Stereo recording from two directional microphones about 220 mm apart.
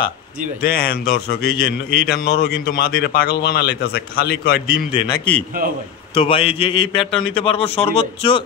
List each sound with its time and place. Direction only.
0.6 s a man's voice: 45° left (ahead or behind)
4.9 s speech: 20° left (ahead or behind)
7.0 s speech: centre (ahead or behind)
7.3 s speech: 25° left (ahead or behind)